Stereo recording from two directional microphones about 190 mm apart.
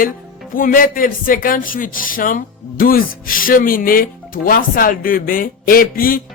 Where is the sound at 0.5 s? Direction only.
45° left (ahead or behind).